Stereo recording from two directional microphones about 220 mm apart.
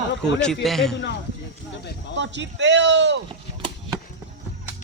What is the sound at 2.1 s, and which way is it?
Speech, 55° right (ahead or behind).